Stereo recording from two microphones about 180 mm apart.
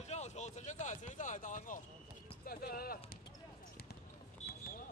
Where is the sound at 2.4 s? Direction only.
55° left (ahead or behind).